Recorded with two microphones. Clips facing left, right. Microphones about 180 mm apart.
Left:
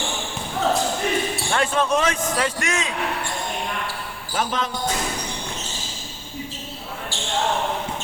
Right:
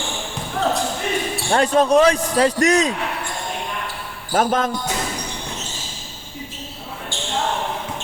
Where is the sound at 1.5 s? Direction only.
35° right (ahead or behind).